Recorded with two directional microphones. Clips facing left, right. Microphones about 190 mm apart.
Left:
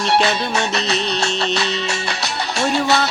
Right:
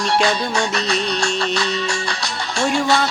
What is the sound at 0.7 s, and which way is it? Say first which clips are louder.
Music: even; 25° left (ahead or behind).